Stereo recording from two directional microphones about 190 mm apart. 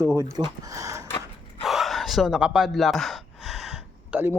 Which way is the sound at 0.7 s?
15° right (ahead or behind).